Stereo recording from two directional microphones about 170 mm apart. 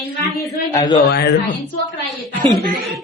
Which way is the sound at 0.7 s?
20° left (ahead or behind).